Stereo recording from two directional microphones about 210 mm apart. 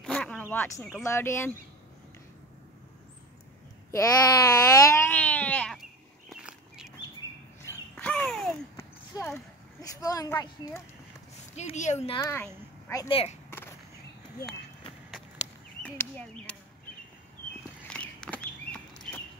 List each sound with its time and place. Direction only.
0.0 s a sound: 5° left (ahead or behind)
1.0 s speech: 15° left (ahead or behind)
3.9 s a sound: 15° left (ahead or behind)
7.6 s a sound: 5° left (ahead or behind)
9.1 s speech: 10° left (ahead or behind)
11.5 s speech: 35° left (ahead or behind)
12.2 s speech: 15° left (ahead or behind)
13.1 s speech: 30° left (ahead or behind)
15.8 s speech: 5° left (ahead or behind)
17.8 s walk: 5° left (ahead or behind)